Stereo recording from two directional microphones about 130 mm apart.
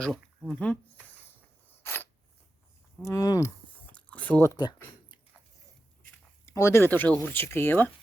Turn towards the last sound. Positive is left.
turn(degrees=15)  # may be behind; listen again after turning